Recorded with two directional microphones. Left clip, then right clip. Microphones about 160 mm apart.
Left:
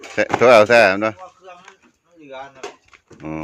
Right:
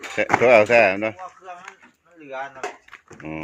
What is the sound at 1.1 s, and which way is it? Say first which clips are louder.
Speech: right 2 dB; 5° right (ahead or behind).